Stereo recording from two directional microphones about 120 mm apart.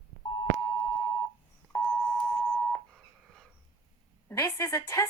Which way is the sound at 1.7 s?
10° left (ahead or behind).